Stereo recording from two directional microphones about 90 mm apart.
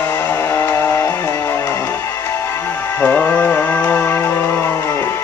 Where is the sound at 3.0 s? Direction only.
20° left (ahead or behind).